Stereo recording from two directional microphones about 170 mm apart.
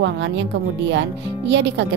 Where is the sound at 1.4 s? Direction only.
90° right.